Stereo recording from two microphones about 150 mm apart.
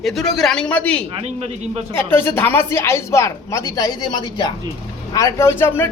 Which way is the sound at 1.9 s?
15° left (ahead or behind).